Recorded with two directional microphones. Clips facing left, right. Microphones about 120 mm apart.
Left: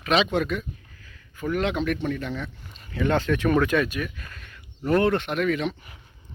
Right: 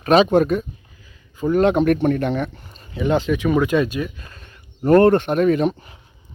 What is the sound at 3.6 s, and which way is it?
Speech, 15° right (ahead or behind).